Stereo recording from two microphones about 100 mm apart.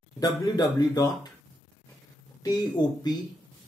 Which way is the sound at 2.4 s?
45° left (ahead or behind).